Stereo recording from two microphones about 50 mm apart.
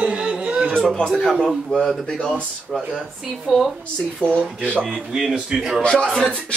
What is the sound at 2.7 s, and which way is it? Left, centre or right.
A man's voice, centre.